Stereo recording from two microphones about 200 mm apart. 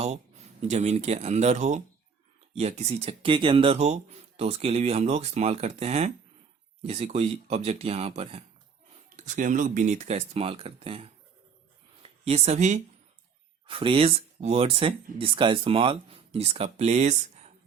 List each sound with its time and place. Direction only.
0.0 s speech: 35° right (ahead or behind)